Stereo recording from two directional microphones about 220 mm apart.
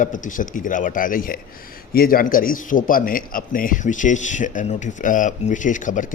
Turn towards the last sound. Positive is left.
turn(degrees=35)  # may be behind; listen again after turning